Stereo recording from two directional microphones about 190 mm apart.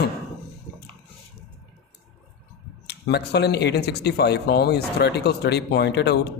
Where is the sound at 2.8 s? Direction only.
60° left (ahead or behind).